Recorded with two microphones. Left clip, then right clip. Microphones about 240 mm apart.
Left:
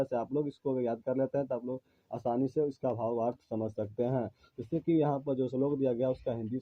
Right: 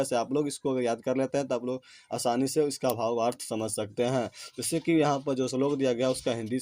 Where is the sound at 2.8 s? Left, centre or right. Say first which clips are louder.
Right 5 dB; right.